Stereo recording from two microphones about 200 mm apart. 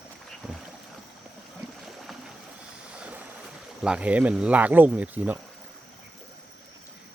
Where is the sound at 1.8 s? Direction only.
Centre (ahead or behind).